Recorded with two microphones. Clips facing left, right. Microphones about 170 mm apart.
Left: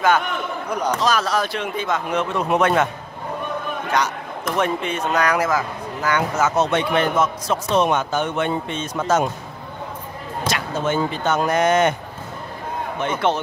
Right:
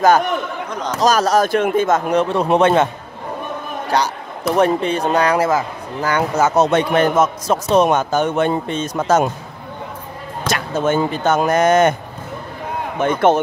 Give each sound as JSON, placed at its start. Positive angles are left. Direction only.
{"t": 0.0, "sound": "a man's voice", "side_deg": -40}
{"t": 0.7, "sound": "speech", "side_deg": 10}
{"t": 1.0, "sound": "a man's voice", "side_deg": -40}
{"t": 10.5, "sound": "speech", "side_deg": -45}
{"t": 13.0, "sound": "speech", "side_deg": -50}